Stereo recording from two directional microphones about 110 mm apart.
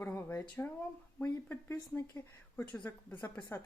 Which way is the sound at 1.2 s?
20° left (ahead or behind).